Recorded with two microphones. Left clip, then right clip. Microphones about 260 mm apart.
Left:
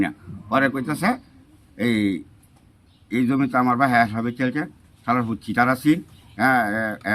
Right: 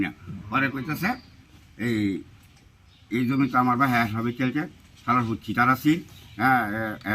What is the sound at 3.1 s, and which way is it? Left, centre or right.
A man's voice, centre.